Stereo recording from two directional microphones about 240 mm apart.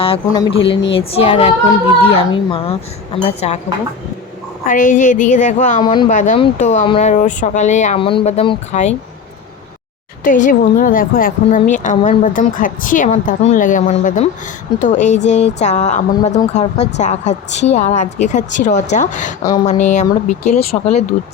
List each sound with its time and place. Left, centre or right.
0.0 s speech: centre
4.6 s a woman's voice: left
5.8 s speech: centre
6.1 s speech: left
10.2 s a woman's voice: left
19.4 s speech: centre
19.6 s speech: left